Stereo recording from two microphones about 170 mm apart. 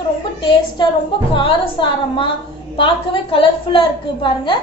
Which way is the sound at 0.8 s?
25° left (ahead or behind).